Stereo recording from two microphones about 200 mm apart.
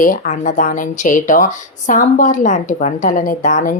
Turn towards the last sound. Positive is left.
turn(degrees=40)  # may be behind; listen again after turning